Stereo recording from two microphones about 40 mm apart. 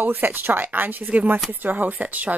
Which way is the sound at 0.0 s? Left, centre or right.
Right.